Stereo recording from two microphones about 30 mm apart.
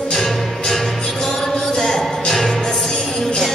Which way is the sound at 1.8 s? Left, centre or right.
Centre.